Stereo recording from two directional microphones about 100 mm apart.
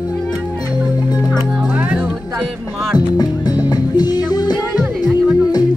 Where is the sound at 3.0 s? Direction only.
40° left (ahead or behind).